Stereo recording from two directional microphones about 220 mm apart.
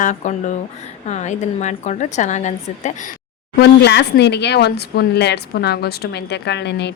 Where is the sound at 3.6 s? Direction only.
50° left (ahead or behind).